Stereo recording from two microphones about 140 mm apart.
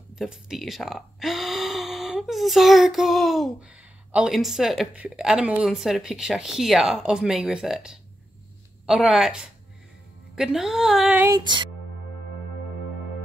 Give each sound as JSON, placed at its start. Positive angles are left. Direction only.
{"t": 0.1, "sound": "speech", "side_deg": -5}
{"t": 11.1, "sound": "music", "side_deg": -25}